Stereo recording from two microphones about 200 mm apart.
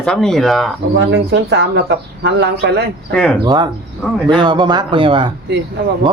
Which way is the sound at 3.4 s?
20° right (ahead or behind).